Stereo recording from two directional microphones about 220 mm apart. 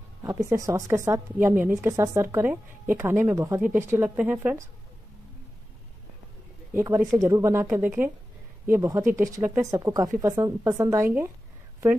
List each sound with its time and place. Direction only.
0.2 s a woman's voice: 15° right (ahead or behind)
6.7 s a woman's voice: 10° right (ahead or behind)